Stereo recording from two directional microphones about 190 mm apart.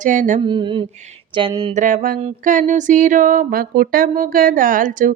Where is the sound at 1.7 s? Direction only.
40° right (ahead or behind).